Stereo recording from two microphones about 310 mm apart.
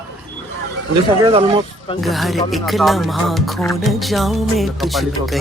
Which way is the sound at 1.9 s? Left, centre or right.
Centre.